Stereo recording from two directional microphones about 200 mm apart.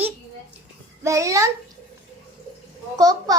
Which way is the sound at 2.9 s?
20° right (ahead or behind).